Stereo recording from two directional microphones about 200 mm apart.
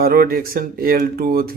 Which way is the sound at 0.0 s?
50° right (ahead or behind).